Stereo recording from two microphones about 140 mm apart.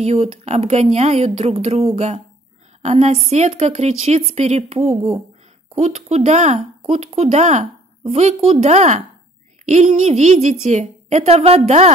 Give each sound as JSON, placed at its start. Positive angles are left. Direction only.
{"t": 0.0, "sound": "a woman's voice", "side_deg": -50}